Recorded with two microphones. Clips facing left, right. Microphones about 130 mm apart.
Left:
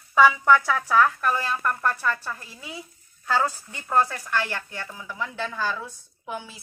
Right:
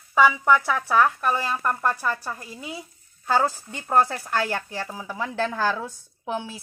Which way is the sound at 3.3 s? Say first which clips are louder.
Right 2 dB; 25° right (ahead or behind).